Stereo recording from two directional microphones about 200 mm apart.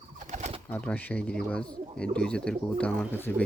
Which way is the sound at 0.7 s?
10° left (ahead or behind).